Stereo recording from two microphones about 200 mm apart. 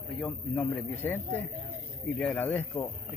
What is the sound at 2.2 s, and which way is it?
Speech, 5° left (ahead or behind).